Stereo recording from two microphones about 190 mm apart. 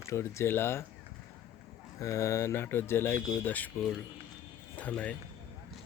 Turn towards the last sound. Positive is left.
turn(degrees=5)  # may be behind; listen again after turning